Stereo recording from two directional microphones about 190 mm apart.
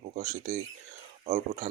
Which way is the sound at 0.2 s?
40° right (ahead or behind).